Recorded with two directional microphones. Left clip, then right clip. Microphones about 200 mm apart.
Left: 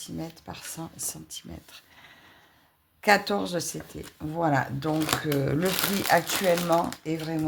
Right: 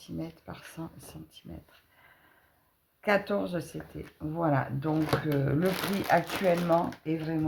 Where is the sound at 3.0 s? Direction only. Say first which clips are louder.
Left 5 dB; 40° left (ahead or behind).